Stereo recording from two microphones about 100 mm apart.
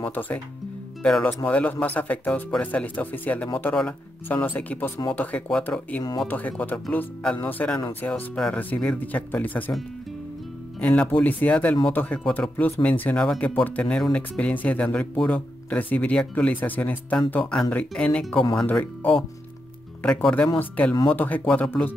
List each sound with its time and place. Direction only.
0.0 s speech: 15° left (ahead or behind)
10.8 s speech: 15° left (ahead or behind)